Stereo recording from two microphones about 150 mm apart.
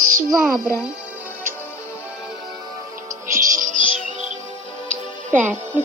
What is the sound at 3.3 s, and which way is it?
Music, 55° right (ahead or behind).